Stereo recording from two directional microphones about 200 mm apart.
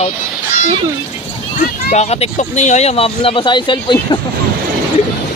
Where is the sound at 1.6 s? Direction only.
35° left (ahead or behind).